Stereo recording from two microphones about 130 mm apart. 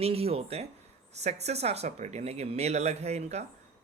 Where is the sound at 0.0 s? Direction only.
50° right (ahead or behind).